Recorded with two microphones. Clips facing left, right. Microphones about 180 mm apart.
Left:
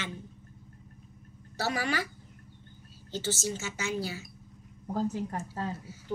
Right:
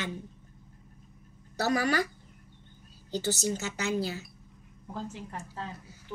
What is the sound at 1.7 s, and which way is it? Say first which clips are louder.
Speech: right 4 dB; 45° right (ahead or behind).